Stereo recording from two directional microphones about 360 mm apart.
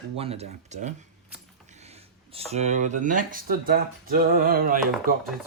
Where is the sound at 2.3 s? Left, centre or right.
Centre.